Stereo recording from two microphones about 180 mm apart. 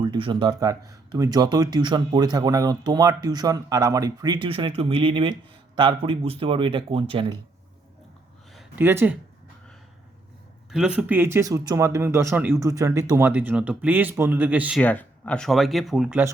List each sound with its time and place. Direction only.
0.0 s speech: 25° right (ahead or behind)
8.5 s a sound: 10° right (ahead or behind)
10.7 s speech: 5° right (ahead or behind)
14.8 s speech: 10° left (ahead or behind)